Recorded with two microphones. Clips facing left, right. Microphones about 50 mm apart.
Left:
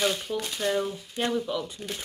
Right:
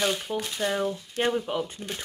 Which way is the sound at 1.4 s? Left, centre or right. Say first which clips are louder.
Right 1 dB; right.